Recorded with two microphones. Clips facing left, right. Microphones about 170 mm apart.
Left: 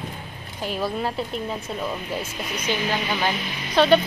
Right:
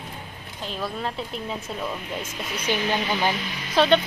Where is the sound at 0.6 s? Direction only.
5° left (ahead or behind).